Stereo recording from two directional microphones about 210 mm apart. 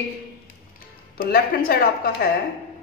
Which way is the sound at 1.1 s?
45° left (ahead or behind).